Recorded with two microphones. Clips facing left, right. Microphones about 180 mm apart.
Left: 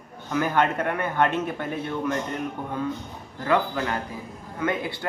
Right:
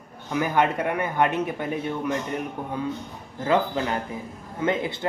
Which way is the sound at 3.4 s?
20° right (ahead or behind).